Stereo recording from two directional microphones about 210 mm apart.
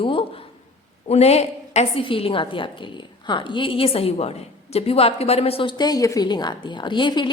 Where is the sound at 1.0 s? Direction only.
30° left (ahead or behind).